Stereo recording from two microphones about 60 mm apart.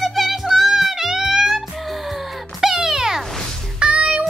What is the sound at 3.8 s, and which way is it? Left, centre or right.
Music, centre.